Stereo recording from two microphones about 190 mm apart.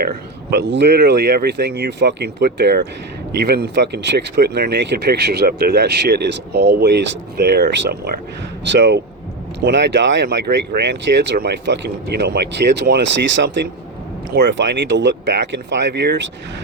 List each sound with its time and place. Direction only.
0.5 s speech: 60° right (ahead or behind)
8.7 s speech: 65° right (ahead or behind)